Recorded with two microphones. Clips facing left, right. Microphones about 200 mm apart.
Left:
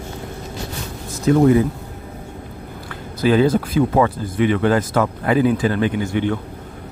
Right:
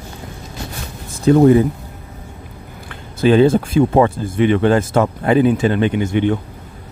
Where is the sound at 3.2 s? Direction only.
25° right (ahead or behind).